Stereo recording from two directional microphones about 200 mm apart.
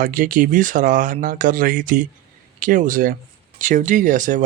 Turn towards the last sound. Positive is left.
turn(degrees=-40)  # may be behind; listen again after turning